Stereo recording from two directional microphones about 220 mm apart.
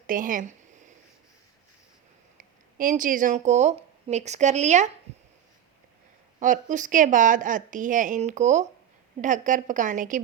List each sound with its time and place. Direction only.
0.1 s a woman's voice: 40° right (ahead or behind)
2.4 s speech: 35° right (ahead or behind)
6.4 s a woman's voice: 35° right (ahead or behind)